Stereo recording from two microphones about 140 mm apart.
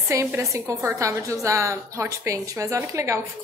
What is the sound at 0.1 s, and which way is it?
A woman's voice, 20° right (ahead or behind).